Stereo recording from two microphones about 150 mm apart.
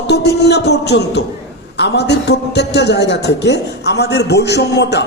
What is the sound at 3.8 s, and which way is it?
Speech, 90° left.